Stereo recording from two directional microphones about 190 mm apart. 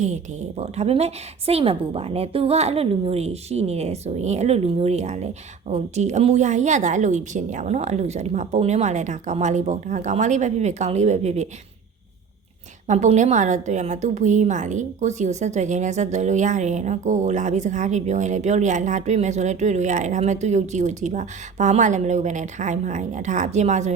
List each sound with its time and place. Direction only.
0.6 s a woman's voice: 35° right (ahead or behind)
12.9 s a woman's voice: 40° right (ahead or behind)